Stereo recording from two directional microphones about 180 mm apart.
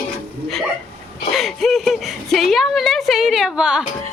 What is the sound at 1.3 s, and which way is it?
Speech, centre (ahead or behind).